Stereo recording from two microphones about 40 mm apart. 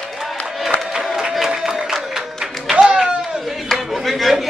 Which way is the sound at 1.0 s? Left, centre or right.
Centre.